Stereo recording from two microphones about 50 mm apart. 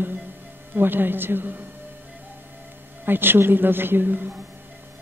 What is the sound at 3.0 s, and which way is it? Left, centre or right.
A man's voice, right.